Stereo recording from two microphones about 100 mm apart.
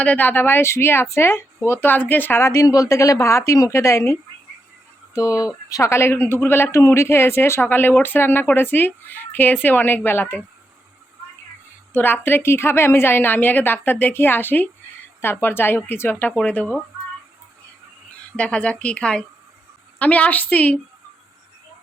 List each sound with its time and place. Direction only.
0.0 s speech: 15° left (ahead or behind)
2.5 s speech: 35° left (ahead or behind); by 10.4 s 20° left (ahead or behind)
11.9 s speech: 20° left (ahead or behind)
18.3 s a woman's voice: 10° left (ahead or behind)